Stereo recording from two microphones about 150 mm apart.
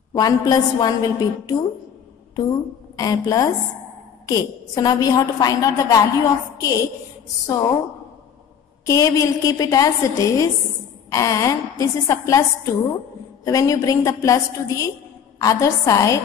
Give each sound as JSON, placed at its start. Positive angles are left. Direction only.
{"t": 0.1, "sound": "a woman's voice", "side_deg": 25}
{"t": 3.0, "sound": "a woman's voice", "side_deg": 25}
{"t": 8.8, "sound": "a woman's voice", "side_deg": 20}